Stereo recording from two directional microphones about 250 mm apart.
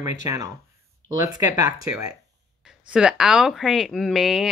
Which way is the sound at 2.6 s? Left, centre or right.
Centre.